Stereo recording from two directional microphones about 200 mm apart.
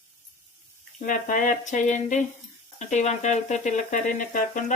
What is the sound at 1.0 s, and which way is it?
Speech, 40° left (ahead or behind).